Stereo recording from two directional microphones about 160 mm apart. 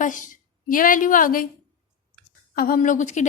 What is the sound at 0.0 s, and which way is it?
A woman's voice, 55° left (ahead or behind).